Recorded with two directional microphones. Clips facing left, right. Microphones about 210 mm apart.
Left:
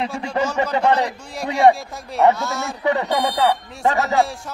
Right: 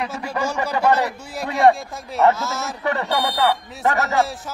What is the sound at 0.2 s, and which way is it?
Speech, 25° left (ahead or behind).